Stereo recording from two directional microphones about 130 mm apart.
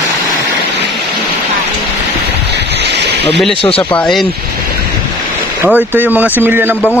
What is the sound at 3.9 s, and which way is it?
Speech, 5° left (ahead or behind).